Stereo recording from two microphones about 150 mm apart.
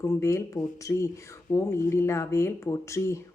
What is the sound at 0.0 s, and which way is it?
Speech, 20° left (ahead or behind).